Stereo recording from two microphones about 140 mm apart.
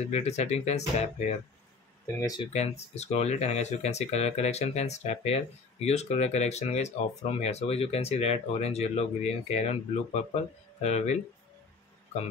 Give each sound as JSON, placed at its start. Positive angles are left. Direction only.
{"t": 0.1, "sound": "speech", "side_deg": 50}
{"t": 2.1, "sound": "speech", "side_deg": 25}
{"t": 2.5, "sound": "speech", "side_deg": 50}